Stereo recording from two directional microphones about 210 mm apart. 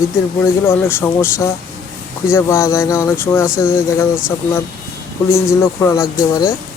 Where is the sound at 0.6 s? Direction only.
10° left (ahead or behind).